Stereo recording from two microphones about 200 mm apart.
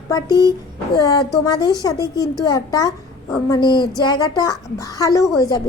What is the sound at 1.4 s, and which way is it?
A woman's voice, 20° left (ahead or behind).